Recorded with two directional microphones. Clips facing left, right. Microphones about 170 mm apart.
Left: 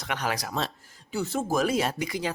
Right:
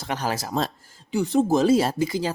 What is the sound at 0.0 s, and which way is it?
Speech, 35° right (ahead or behind).